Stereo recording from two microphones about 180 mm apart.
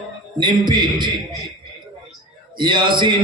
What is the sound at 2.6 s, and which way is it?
Speech, 25° right (ahead or behind).